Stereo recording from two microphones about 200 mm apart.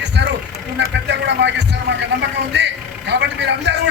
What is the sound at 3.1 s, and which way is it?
Speech, 60° right (ahead or behind).